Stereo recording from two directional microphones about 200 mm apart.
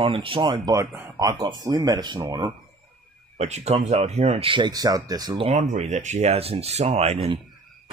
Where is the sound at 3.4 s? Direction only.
35° right (ahead or behind).